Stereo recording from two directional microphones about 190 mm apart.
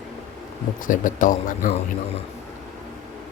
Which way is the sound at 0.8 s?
45° left (ahead or behind).